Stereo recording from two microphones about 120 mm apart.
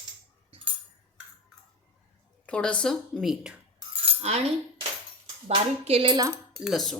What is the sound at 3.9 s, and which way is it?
Cutlery, 60° right (ahead or behind).